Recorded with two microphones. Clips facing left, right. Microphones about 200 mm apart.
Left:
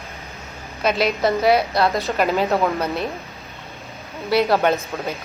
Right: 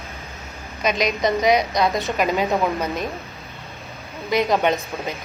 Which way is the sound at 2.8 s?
10° right (ahead or behind).